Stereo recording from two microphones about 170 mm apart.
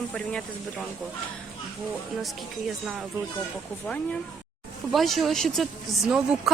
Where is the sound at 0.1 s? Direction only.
5° left (ahead or behind).